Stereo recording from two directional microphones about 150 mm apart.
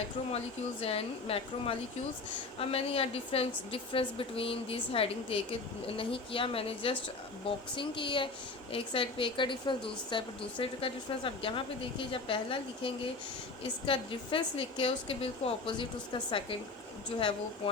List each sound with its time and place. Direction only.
0.8 s a woman's voice: 40° left (ahead or behind)
17.1 s a woman's voice: 35° left (ahead or behind)